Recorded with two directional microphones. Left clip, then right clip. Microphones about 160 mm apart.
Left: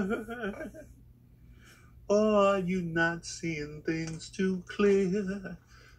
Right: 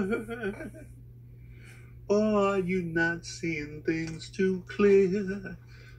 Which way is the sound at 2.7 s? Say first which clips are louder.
Right 1 dB; 20° right (ahead or behind).